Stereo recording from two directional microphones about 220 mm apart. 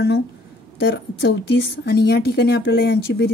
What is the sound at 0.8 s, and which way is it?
A woman's voice, 50° left (ahead or behind).